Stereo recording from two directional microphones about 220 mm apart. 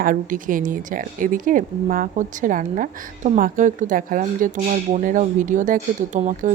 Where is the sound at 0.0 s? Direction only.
35° right (ahead or behind).